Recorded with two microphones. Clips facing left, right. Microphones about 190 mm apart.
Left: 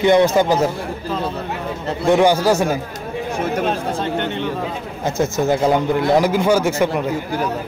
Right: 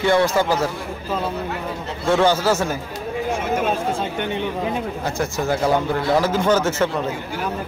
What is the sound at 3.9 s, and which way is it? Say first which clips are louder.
Chatter: left 2 dB; 10° right (ahead or behind).